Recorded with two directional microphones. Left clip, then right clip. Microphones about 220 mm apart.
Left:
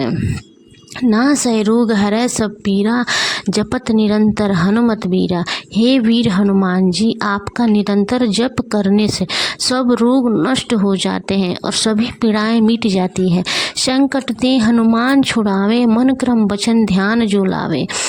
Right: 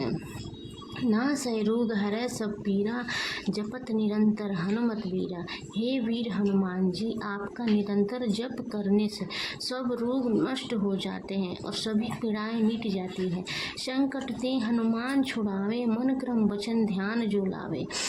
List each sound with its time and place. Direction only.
1.1 s speech: 45° left (ahead or behind)